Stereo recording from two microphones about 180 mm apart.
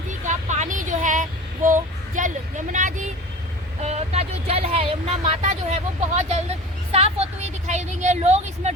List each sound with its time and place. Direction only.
0.3 s child singing: 40° right (ahead or behind)
3.8 s a woman's voice: 35° right (ahead or behind)